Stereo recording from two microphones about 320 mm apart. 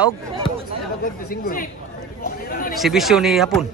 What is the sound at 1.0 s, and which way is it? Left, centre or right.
Speech, left.